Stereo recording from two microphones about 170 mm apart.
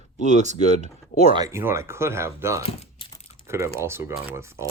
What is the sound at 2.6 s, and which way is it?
Speech, 35° left (ahead or behind).